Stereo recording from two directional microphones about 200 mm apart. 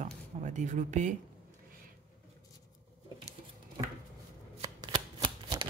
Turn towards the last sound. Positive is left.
turn(degrees=-25)  # may be behind; listen again after turning